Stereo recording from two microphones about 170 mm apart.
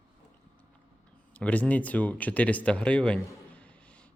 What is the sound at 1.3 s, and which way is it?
Speech, 10° left (ahead or behind).